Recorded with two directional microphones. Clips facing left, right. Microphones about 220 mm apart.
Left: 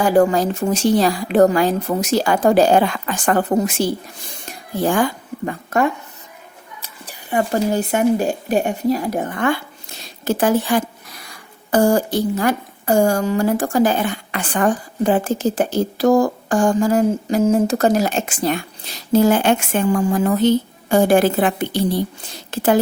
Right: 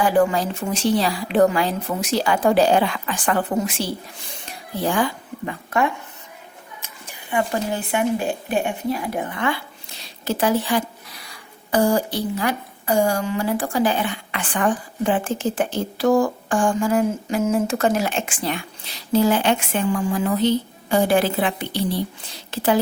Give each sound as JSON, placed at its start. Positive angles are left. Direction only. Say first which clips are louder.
{"t": 0.0, "sound": "speech", "louder": "left 4 dB", "side_deg": 45}